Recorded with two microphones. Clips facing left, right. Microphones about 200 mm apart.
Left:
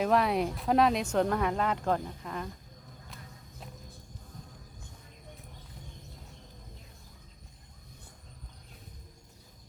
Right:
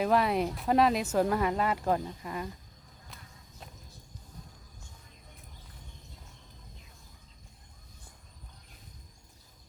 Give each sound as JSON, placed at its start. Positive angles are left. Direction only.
{"t": 0.0, "sound": "speech", "side_deg": 0}